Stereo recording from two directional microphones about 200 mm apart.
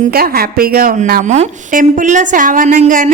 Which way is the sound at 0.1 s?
50° right (ahead or behind).